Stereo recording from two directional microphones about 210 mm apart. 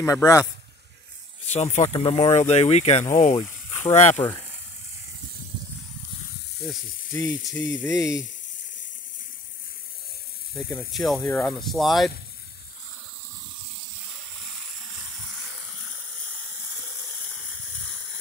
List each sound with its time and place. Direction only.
0.0 s speech: 15° left (ahead or behind)
1.4 s speech: 30° left (ahead or behind)
7.1 s sizzle: 15° left (ahead or behind)
7.5 s speech: 15° left (ahead or behind)
10.5 s speech: 5° left (ahead or behind)